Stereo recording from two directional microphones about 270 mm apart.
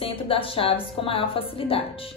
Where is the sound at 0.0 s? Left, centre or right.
Centre.